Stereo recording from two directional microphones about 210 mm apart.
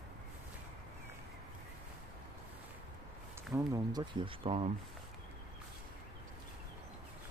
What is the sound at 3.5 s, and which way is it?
Speech, 15° right (ahead or behind).